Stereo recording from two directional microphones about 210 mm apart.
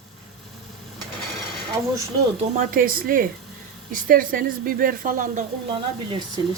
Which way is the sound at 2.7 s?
40° right (ahead or behind).